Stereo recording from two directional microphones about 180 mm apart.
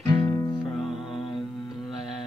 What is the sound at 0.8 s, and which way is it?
Music, centre (ahead or behind).